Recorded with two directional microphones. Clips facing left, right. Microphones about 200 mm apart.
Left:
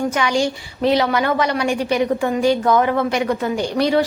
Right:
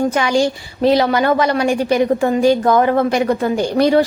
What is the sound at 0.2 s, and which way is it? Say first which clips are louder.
A woman's voice: right 3 dB; 40° right (ahead or behind).